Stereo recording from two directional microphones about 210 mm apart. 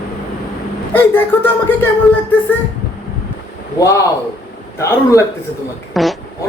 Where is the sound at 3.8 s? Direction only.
15° left (ahead or behind).